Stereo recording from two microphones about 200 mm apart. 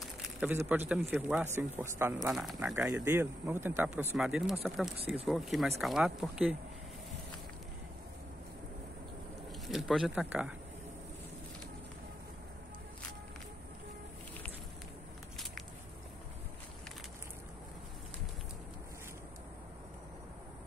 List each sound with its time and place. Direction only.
0.4 s speech: 10° right (ahead or behind)
2.3 s speech: centre (ahead or behind)
4.9 s speech: 30° right (ahead or behind)
5.2 s speech: centre (ahead or behind)
9.7 s speech: centre (ahead or behind)